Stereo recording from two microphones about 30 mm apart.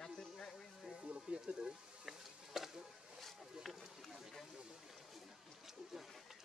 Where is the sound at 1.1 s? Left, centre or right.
Right.